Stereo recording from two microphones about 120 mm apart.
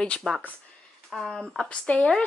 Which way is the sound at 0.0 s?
5° left (ahead or behind).